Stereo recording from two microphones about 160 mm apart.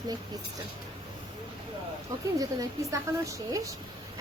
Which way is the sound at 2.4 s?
20° right (ahead or behind).